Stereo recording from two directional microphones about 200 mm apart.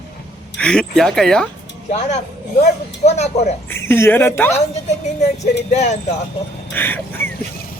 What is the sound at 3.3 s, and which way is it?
Speech, 30° left (ahead or behind).